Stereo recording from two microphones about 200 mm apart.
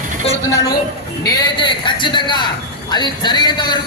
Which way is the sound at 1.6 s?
25° left (ahead or behind).